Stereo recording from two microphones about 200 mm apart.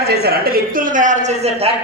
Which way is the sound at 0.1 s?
55° right (ahead or behind).